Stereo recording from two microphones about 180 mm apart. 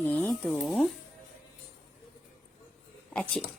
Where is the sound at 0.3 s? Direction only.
5° left (ahead or behind).